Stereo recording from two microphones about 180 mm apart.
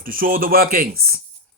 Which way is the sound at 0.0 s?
50° right (ahead or behind).